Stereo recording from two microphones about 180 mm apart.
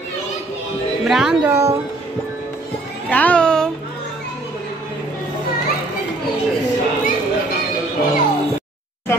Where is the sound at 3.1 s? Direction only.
5° left (ahead or behind).